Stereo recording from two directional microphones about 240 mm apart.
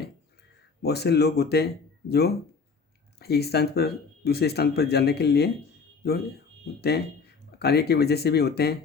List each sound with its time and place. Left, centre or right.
0.8 s speech: left